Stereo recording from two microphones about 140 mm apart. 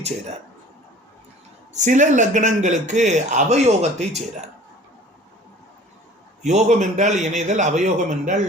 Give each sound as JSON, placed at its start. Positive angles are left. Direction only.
{"t": 1.7, "sound": "a man's voice", "side_deg": -60}
{"t": 6.4, "sound": "a man's voice", "side_deg": -55}